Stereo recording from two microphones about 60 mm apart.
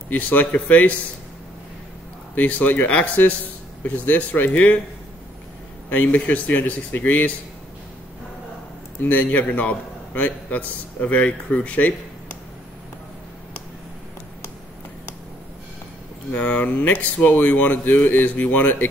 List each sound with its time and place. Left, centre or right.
0.1 s a man's voice: left
2.3 s a man's voice: left
2.9 s a man's voice: left
5.9 s a man's voice: left
9.0 s a man's voice: left
16.3 s a man's voice: left